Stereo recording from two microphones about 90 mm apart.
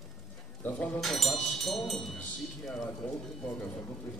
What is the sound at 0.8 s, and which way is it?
Speech, 5° left (ahead or behind).